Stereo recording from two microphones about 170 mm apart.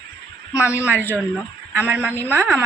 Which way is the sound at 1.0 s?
10° left (ahead or behind).